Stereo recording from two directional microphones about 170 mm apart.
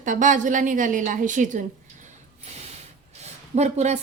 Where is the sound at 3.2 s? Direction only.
40° right (ahead or behind).